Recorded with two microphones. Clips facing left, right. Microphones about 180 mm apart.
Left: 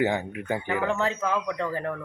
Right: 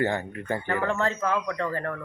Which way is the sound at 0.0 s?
15° left (ahead or behind).